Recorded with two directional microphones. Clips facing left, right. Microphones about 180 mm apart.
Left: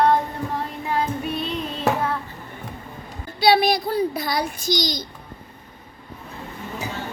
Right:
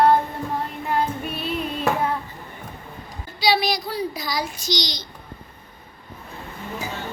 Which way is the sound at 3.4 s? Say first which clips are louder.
Left 4 dB; 55° left (ahead or behind).